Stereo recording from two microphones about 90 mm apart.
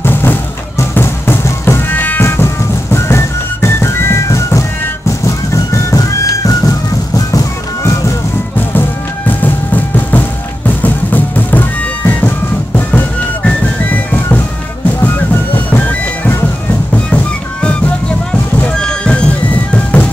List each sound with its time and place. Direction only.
0.0 s music: 25° left (ahead or behind)
9.3 s music: 20° left (ahead or behind)